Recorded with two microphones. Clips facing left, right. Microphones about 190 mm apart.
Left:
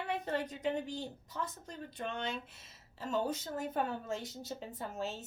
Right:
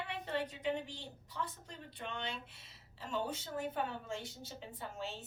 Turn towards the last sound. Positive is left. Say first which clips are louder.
# left 4 dB
turn(degrees=45)  # may be behind; listen again after turning